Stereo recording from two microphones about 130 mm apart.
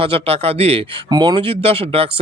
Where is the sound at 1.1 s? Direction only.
35° right (ahead or behind).